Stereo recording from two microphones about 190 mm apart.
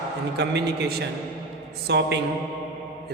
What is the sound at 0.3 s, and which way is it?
A man's voice, 60° right (ahead or behind).